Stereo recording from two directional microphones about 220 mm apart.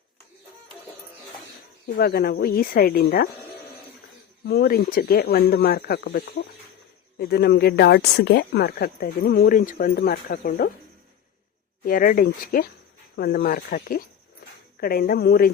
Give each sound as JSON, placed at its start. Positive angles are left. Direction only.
{"t": 2.0, "sound": "speech", "side_deg": 45}
{"t": 4.4, "sound": "speech", "side_deg": 45}
{"t": 11.9, "sound": "speech", "side_deg": 40}